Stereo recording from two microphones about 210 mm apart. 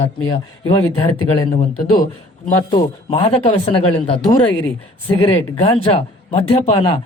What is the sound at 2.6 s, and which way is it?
A woman's voice, 25° left (ahead or behind).